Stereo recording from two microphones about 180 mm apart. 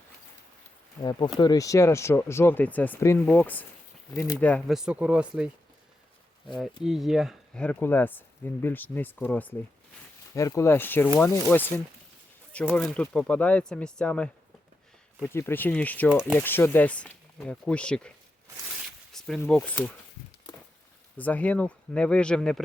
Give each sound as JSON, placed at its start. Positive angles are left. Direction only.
{"t": 1.4, "sound": "speech", "side_deg": 20}
{"t": 4.4, "sound": "speech", "side_deg": 5}
{"t": 4.8, "sound": "speech", "side_deg": -5}
{"t": 6.6, "sound": "speech", "side_deg": 0}
{"t": 12.7, "sound": "speech", "side_deg": 5}
{"t": 19.1, "sound": "a sound", "side_deg": 0}
{"t": 19.5, "sound": "speech", "side_deg": 5}
{"t": 21.2, "sound": "speech", "side_deg": 10}